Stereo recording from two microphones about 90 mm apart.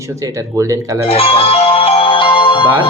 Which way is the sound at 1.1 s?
90° left.